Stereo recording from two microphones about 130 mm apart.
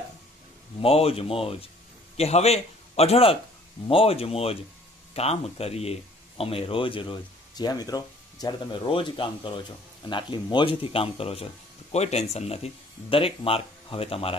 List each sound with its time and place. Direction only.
0.7 s a man's voice: 50° left (ahead or behind)